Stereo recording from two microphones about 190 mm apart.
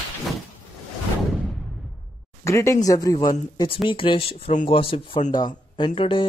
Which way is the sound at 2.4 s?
15° left (ahead or behind).